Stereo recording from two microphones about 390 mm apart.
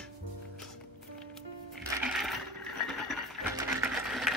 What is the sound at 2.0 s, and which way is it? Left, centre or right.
Coin, centre.